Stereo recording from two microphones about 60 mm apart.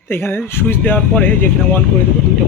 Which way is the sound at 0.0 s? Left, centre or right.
Left.